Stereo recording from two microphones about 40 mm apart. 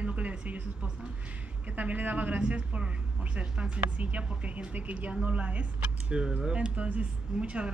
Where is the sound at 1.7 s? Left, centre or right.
Right.